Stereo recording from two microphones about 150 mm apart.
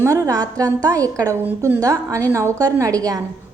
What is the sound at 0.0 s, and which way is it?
A woman's voice, 25° right (ahead or behind).